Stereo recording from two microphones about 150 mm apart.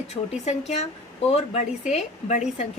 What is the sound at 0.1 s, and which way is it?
A woman's voice, 45° left (ahead or behind).